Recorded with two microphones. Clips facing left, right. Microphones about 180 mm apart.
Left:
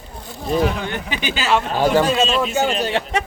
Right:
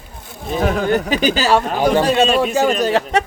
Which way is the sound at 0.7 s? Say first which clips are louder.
Right 8 dB; 45° right (ahead or behind).